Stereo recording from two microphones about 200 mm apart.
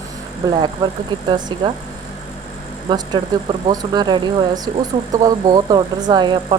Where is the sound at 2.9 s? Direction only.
20° right (ahead or behind).